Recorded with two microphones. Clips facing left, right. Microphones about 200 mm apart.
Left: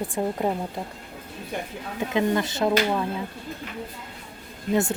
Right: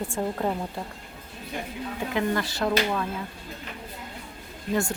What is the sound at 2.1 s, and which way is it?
Speech, 20° left (ahead or behind).